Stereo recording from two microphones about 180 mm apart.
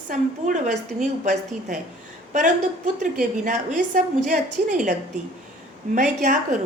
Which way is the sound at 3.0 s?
45° right (ahead or behind).